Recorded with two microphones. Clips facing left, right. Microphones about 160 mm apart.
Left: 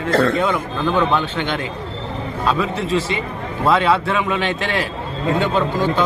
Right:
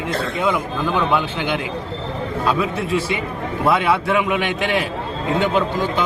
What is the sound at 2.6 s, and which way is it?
A man's voice, 15° right (ahead or behind).